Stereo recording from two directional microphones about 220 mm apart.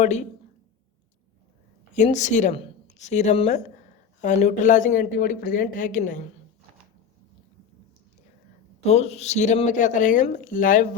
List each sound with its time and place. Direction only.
0.0 s speech: 30° left (ahead or behind)
1.9 s speech: 35° left (ahead or behind)
8.8 s speech: 30° left (ahead or behind)